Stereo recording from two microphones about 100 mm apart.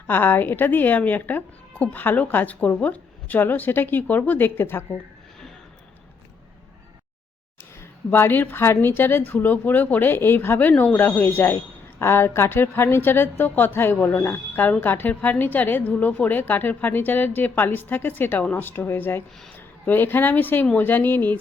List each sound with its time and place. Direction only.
0.1 s a woman's voice: 20° left (ahead or behind)
7.8 s a woman's voice: 20° left (ahead or behind)